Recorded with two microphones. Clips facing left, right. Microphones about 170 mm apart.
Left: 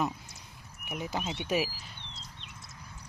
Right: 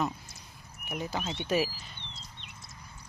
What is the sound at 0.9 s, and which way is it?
Speech, 10° left (ahead or behind).